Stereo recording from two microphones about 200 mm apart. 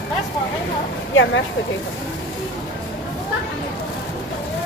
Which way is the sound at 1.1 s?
70° left (ahead or behind).